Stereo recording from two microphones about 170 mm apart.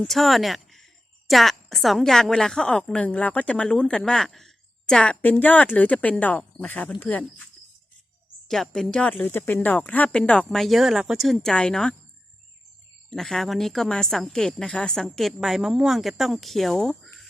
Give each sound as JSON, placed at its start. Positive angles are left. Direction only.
{"t": 0.0, "sound": "a woman's voice", "side_deg": 0}
{"t": 8.4, "sound": "a woman's voice", "side_deg": 0}
{"t": 13.1, "sound": "a woman's voice", "side_deg": 0}